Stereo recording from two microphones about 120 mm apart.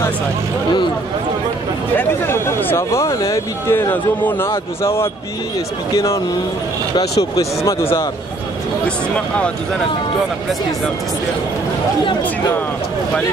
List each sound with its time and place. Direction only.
2.0 s speech: 20° left (ahead or behind)
8.8 s speech: 10° left (ahead or behind)